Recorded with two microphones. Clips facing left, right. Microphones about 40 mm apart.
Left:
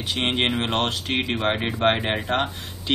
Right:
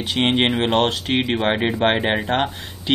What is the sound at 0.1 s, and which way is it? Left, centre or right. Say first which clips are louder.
Speech: right 4 dB; centre.